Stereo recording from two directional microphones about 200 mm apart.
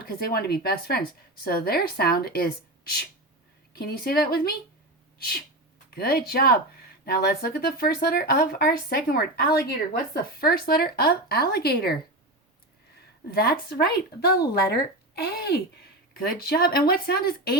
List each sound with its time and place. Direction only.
0.0 s speech: 50° left (ahead or behind)
5.9 s speech: 50° left (ahead or behind)
13.3 s speech: 50° left (ahead or behind)